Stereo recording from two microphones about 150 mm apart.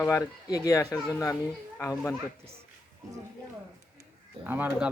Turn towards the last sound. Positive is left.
turn(degrees=-10)  # may be behind; listen again after turning